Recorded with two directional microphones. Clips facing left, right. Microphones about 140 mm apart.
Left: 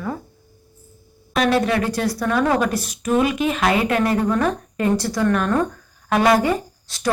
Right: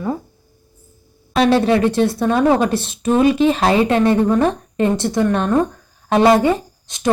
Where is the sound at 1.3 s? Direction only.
30° right (ahead or behind).